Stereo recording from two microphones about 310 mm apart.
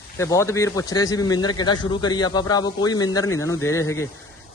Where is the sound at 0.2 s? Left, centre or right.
Centre.